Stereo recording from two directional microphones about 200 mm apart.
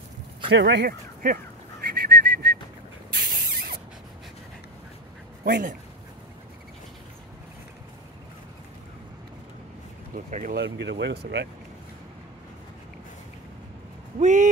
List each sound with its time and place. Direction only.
0.5 s a sound: 60° right (ahead or behind)
3.1 s rodents: 50° right (ahead or behind)
5.4 s speech: 45° right (ahead or behind)
10.1 s a sound: 40° right (ahead or behind)
10.5 s speech: 60° right (ahead or behind)
14.2 s speech: 35° right (ahead or behind)